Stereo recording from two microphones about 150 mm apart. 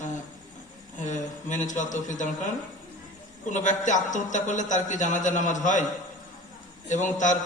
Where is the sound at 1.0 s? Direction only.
55° left (ahead or behind).